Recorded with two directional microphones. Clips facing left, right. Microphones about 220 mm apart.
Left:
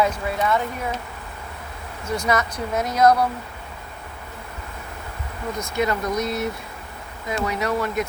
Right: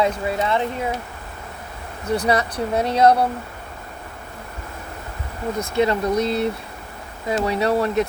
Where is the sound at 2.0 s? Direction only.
35° right (ahead or behind).